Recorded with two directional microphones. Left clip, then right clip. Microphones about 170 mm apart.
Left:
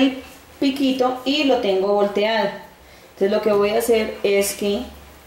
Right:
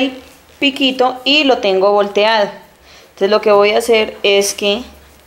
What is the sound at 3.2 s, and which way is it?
Speech, 10° left (ahead or behind).